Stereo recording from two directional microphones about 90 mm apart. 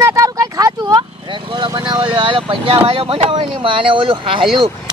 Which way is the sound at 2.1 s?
70° right (ahead or behind).